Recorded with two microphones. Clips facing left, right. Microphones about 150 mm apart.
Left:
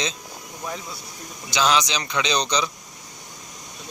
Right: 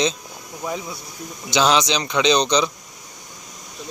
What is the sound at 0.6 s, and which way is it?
Speech, 15° right (ahead or behind).